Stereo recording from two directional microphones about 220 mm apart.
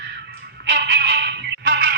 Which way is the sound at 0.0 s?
50° right (ahead or behind).